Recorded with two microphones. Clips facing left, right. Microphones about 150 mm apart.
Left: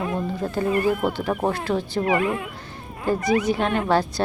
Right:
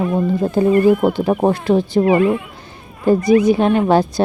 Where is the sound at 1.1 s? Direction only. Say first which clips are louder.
Right 8 dB; 15° right (ahead or behind).